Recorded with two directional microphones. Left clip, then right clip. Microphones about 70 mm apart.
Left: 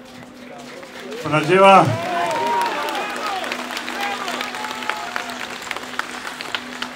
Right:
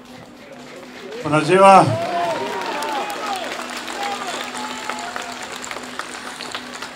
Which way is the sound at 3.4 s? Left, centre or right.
Left.